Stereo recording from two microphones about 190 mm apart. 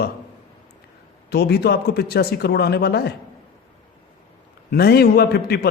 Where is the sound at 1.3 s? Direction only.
60° left (ahead or behind).